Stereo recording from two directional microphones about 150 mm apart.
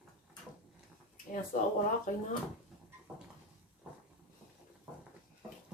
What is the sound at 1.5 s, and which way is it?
Speech, 60° left (ahead or behind).